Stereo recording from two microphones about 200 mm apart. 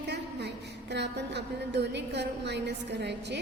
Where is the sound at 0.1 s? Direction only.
55° right (ahead or behind).